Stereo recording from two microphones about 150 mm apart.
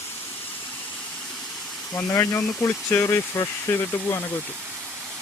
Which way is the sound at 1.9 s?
20° left (ahead or behind).